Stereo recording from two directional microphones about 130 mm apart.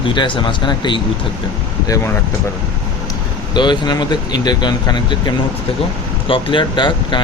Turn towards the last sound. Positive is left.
turn(degrees=35)  # may be behind; listen again after turning